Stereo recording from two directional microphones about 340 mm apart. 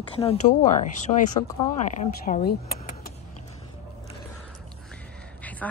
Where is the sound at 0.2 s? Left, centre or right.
Centre.